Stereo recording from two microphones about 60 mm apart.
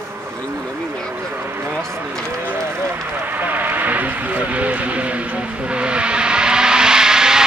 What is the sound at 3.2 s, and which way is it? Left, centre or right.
Vehicle, right.